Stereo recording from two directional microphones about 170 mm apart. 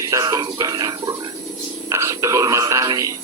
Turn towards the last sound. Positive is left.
turn(degrees=-20)  # may be behind; listen again after turning